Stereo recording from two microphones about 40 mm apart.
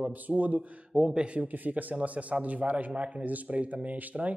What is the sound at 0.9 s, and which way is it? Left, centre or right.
Speech, right.